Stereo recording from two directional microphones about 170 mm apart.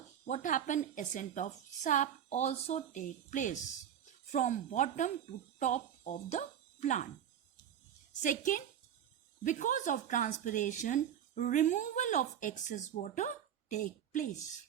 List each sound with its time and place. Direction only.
0.3 s speech: 50° left (ahead or behind)
8.2 s speech: 50° left (ahead or behind)